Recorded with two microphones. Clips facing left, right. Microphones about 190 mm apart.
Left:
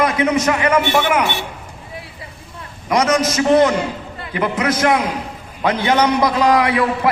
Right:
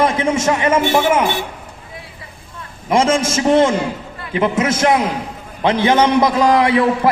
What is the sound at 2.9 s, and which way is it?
A man's voice, 25° right (ahead or behind).